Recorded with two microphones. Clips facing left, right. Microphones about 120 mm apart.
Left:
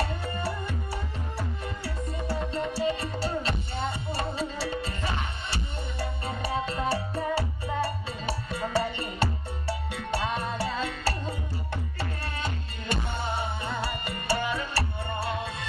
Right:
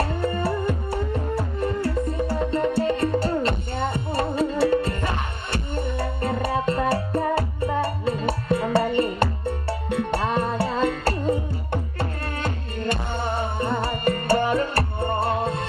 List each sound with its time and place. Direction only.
0.0 s music: 55° right (ahead or behind)